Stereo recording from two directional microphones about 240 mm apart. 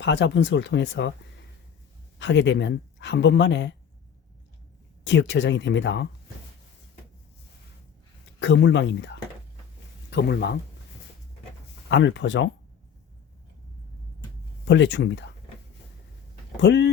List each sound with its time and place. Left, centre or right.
0.0 s speech: left
2.1 s speech: left
5.0 s speech: left
8.4 s speech: left
11.9 s speech: left
14.6 s speech: left
16.6 s speech: left